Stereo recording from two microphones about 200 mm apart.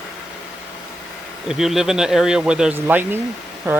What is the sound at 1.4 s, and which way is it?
Speech, centre (ahead or behind).